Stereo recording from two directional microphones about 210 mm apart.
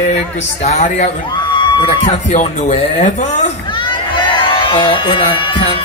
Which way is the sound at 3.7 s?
25° left (ahead or behind).